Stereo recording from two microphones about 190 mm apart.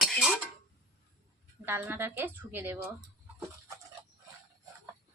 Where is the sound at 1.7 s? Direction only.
10° right (ahead or behind).